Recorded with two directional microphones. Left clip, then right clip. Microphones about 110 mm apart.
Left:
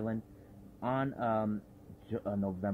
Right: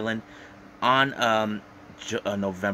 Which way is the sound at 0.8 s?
15° right (ahead or behind).